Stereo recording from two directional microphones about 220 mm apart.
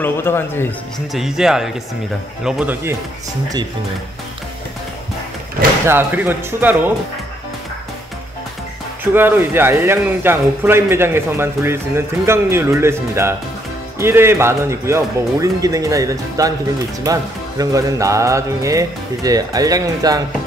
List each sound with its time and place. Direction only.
0.0 s speech: 10° left (ahead or behind)
1.1 s speech: centre (ahead or behind)
5.9 s speech: 10° right (ahead or behind)
9.1 s speech: 10° right (ahead or behind)